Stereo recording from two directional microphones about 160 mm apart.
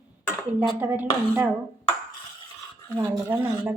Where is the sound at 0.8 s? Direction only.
10° right (ahead or behind).